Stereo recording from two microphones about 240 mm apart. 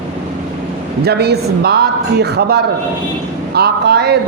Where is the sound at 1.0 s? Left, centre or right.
Right.